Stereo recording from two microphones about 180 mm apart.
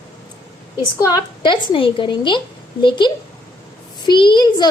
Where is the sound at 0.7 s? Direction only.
20° left (ahead or behind).